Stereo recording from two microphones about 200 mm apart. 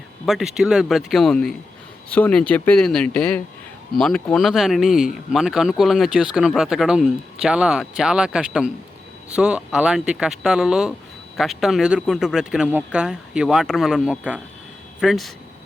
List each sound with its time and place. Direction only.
0.3 s speech: centre (ahead or behind)